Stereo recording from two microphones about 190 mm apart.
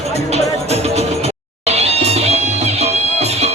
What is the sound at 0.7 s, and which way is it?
Music, 35° right (ahead or behind).